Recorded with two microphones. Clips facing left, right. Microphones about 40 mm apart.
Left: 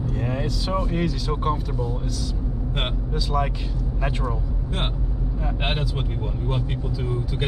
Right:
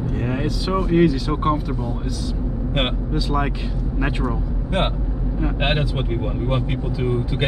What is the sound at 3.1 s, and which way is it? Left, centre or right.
Speech, centre.